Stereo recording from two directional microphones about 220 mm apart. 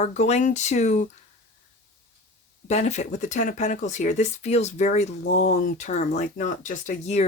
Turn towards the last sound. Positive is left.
turn(degrees=35)  # may be behind; listen again after turning